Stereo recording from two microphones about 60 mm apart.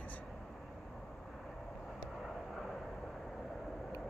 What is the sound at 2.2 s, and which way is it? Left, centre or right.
Vehicle, centre.